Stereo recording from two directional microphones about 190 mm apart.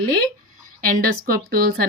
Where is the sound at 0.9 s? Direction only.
50° right (ahead or behind).